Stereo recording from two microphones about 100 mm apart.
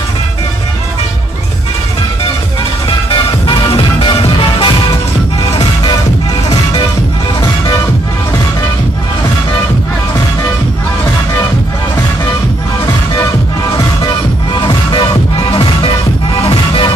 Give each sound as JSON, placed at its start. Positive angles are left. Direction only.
{"t": 3.1, "sound": "music", "side_deg": 50}
{"t": 14.5, "sound": "music", "side_deg": 50}
{"t": 15.5, "sound": "music", "side_deg": 60}